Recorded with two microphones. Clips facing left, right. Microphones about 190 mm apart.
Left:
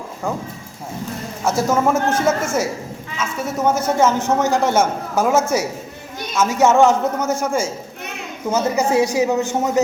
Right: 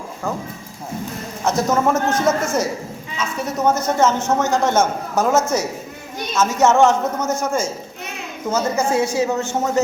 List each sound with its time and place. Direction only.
1.7 s a man's voice: 10° left (ahead or behind)